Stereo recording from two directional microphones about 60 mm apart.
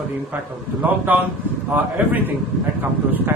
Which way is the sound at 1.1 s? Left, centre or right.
Right.